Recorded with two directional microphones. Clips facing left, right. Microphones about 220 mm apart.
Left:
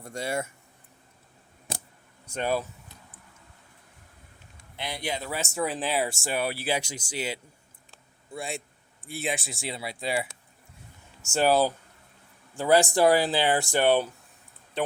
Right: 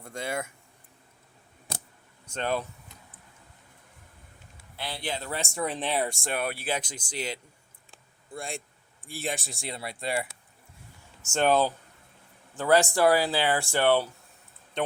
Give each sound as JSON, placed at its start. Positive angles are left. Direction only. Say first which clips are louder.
{"t": 0.0, "sound": "speech", "louder": "left 2 dB", "side_deg": 10}
{"t": 2.2, "sound": "speech", "louder": "left 2 dB", "side_deg": 10}
{"t": 4.8, "sound": "speech", "louder": "left 2 dB", "side_deg": 15}
{"t": 14.8, "sound": "speech", "louder": "left 1 dB", "side_deg": 5}